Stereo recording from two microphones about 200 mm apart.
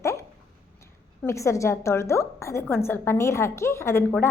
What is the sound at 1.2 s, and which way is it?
A woman's voice, 15° left (ahead or behind).